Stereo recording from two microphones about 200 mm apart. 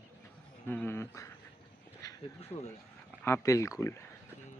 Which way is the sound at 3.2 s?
15° left (ahead or behind).